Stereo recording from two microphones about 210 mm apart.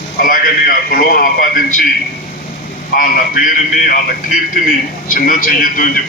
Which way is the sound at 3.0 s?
40° left (ahead or behind).